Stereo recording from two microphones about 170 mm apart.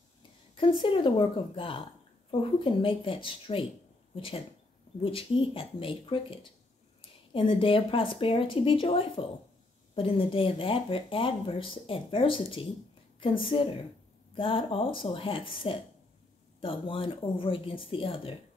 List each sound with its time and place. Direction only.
0.8 s speech: 30° left (ahead or behind)